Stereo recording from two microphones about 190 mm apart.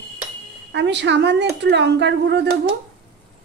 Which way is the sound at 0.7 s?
65° right (ahead or behind).